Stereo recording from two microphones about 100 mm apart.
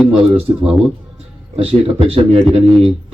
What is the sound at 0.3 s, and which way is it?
Speech, 75° right (ahead or behind).